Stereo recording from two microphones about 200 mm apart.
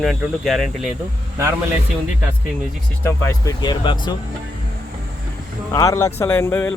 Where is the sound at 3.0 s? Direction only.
15° left (ahead or behind).